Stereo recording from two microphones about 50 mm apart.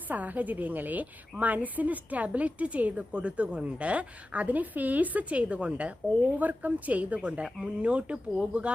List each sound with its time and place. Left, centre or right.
0.1 s a woman's voice: right
6.4 s a woman's voice: right